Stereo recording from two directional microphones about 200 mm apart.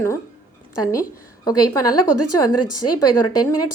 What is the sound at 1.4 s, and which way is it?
Speech, 20° left (ahead or behind).